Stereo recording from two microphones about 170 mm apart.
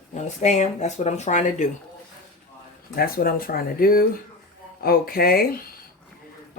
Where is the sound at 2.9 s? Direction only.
60° left (ahead or behind).